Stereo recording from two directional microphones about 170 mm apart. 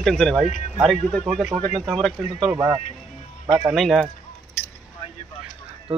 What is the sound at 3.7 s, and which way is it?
Speech, centre (ahead or behind).